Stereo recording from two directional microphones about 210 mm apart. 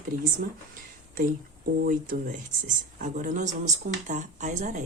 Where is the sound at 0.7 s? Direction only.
40° right (ahead or behind).